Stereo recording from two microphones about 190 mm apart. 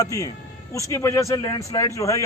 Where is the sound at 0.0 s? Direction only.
15° left (ahead or behind).